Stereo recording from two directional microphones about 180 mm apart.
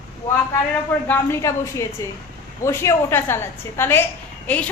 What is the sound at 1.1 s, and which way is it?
A woman's voice, 15° left (ahead or behind).